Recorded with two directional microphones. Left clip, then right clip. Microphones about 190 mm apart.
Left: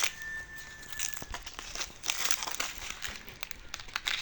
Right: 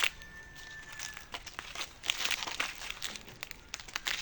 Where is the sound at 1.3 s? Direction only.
10° left (ahead or behind).